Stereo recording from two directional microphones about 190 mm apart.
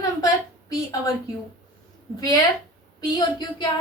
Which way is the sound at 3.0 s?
20° left (ahead or behind).